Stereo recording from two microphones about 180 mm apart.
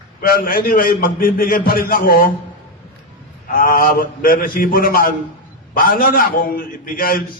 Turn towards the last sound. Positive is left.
turn(degrees=50)  # may be behind; listen again after turning